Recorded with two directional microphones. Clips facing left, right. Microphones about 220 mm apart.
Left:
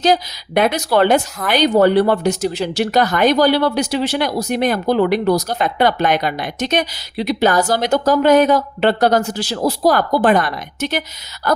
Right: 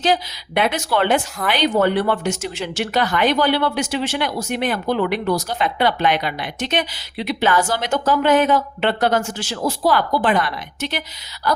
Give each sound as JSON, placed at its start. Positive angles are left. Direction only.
{"t": 0.0, "sound": "speech", "side_deg": 40}